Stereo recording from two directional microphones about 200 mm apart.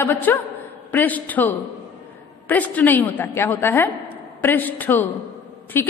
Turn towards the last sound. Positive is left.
turn(degrees=10)  # may be behind; listen again after turning